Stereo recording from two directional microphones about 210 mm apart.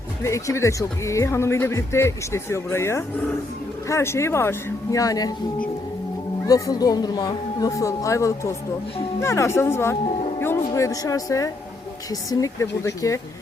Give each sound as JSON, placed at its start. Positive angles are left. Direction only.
{"t": 0.2, "sound": "speech", "side_deg": 15}
{"t": 6.5, "sound": "speech", "side_deg": 15}